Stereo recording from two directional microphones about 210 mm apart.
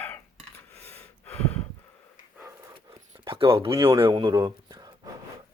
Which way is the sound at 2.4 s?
15° right (ahead or behind).